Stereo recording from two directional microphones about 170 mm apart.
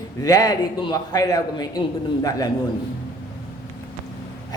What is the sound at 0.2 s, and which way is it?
A man's voice, 20° left (ahead or behind).